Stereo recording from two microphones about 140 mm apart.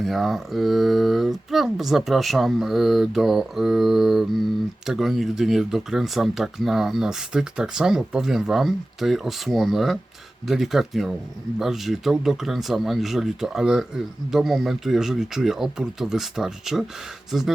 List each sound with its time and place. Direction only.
0.0 s speech: centre (ahead or behind)